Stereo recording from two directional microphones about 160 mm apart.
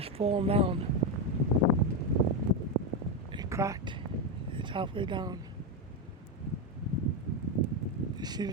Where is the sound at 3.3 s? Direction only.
20° right (ahead or behind).